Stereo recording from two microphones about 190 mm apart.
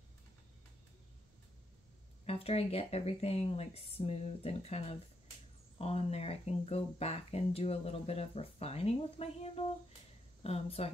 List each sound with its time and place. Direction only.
2.2 s speech: 30° left (ahead or behind)